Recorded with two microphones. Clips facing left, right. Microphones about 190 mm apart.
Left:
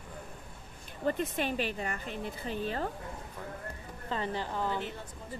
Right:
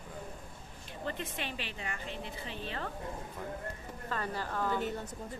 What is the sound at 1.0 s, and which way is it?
A woman's voice, 45° left (ahead or behind).